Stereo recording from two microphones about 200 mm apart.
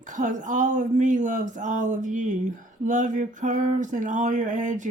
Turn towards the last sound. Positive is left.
turn(degrees=-40)  # may be behind; listen again after turning